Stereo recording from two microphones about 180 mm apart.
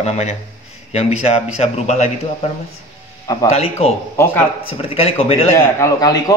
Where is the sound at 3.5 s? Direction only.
35° left (ahead or behind).